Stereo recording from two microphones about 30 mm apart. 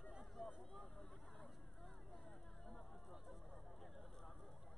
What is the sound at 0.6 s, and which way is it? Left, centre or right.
Vehicle, centre.